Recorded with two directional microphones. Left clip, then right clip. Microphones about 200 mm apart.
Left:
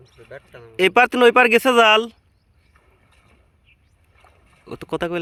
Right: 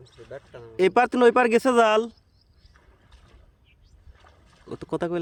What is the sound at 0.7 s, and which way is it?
Speech, centre (ahead or behind).